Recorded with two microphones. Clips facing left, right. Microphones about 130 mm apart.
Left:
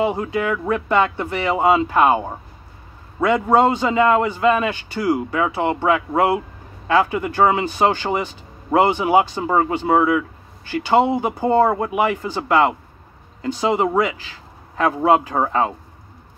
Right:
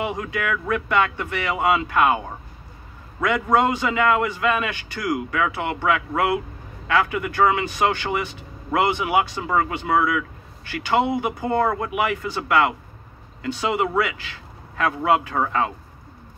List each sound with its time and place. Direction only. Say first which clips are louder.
0.0 s a man's voice: left 6 dB; 30° left (ahead or behind)